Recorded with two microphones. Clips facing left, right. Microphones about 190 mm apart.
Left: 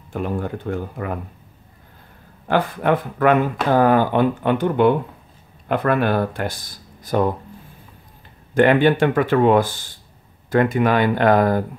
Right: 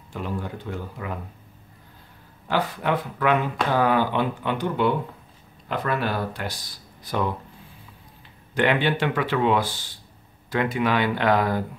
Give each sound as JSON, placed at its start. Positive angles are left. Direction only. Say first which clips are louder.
{"t": 0.1, "sound": "speech", "louder": "left 6 dB", "side_deg": 55}
{"t": 2.4, "sound": "speech", "louder": "left 6 dB", "side_deg": 50}
{"t": 8.5, "sound": "speech", "louder": "left 7 dB", "side_deg": 45}